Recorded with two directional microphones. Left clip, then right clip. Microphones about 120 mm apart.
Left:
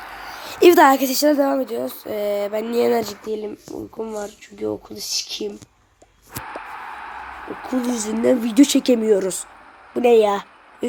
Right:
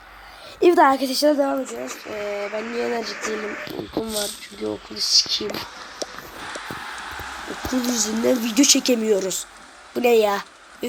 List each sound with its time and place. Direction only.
0.3 s a woman's voice: 25° left (ahead or behind)
1.6 s speech: 70° left (ahead or behind)
4.0 s speech: 10° left (ahead or behind)
4.9 s speech: 25° left (ahead or behind)
7.7 s speech: 25° left (ahead or behind)
8.5 s speech: 35° left (ahead or behind)
9.9 s a sound: 25° left (ahead or behind)